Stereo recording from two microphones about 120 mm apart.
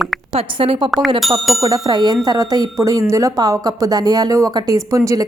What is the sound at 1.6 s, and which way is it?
A woman's voice, 30° right (ahead or behind).